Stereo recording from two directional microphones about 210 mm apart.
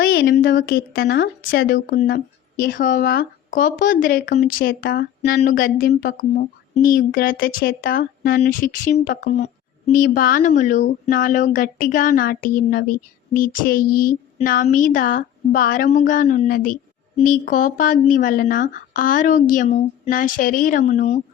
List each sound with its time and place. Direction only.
0.0 s speech: 45° left (ahead or behind)